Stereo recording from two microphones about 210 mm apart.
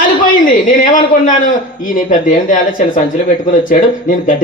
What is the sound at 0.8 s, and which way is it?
A man's voice, 40° left (ahead or behind).